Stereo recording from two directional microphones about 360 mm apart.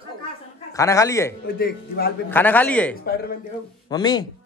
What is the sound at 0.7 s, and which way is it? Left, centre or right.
Speech, centre.